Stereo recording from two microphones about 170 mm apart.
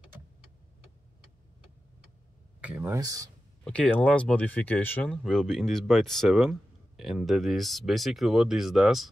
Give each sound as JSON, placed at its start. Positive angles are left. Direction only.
{"t": 2.6, "sound": "a sound", "side_deg": -10}
{"t": 3.0, "sound": "speech", "side_deg": -20}
{"t": 3.6, "sound": "speech", "side_deg": 5}